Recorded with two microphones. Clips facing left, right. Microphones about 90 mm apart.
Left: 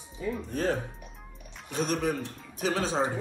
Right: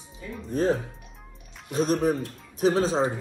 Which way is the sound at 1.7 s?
40° right (ahead or behind).